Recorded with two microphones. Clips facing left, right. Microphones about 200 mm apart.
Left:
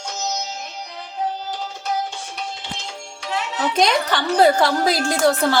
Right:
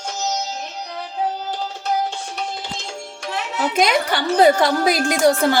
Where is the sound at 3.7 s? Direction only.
10° right (ahead or behind).